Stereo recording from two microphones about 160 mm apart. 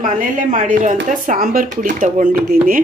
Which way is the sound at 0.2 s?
55° right (ahead or behind).